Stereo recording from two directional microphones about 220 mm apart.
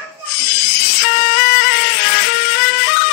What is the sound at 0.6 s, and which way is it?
Music, 45° left (ahead or behind).